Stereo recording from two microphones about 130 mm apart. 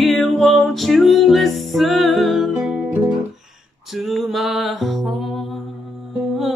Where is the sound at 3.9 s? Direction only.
Centre (ahead or behind).